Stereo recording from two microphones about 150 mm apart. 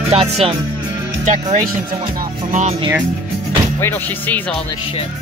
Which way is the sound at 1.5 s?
65° right (ahead or behind).